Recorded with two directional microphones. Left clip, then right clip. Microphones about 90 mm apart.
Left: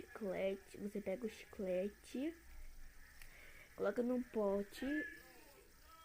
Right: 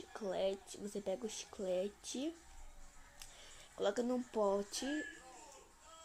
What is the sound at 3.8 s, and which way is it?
Speech, 40° right (ahead or behind).